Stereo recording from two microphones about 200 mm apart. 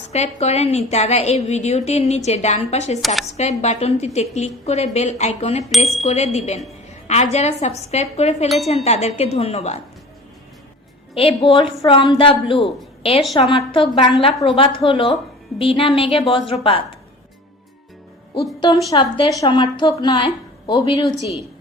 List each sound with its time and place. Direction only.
0.1 s a woman's voice: 35° left (ahead or behind)
11.1 s a woman's voice: 30° left (ahead or behind)
18.9 s a woman's voice: 25° left (ahead or behind)